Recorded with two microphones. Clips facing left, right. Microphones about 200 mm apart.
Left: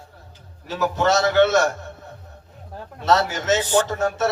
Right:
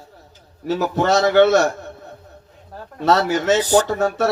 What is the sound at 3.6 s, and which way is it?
Speech, 40° right (ahead or behind).